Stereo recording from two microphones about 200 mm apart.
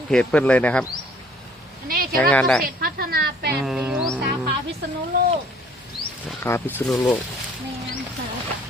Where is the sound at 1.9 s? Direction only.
50° right (ahead or behind).